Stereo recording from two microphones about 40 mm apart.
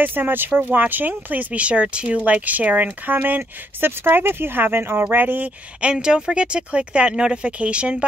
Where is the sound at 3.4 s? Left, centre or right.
Right.